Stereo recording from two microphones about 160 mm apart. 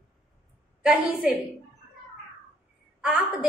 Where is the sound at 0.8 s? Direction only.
5° right (ahead or behind).